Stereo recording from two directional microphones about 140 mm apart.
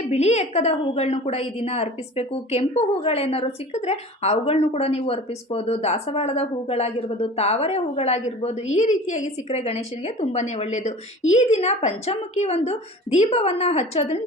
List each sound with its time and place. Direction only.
0.1 s a woman's voice: 50° left (ahead or behind)
9.5 s a woman's voice: 45° left (ahead or behind)